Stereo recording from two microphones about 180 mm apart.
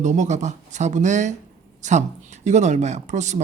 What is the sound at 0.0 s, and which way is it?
Speech, 40° right (ahead or behind).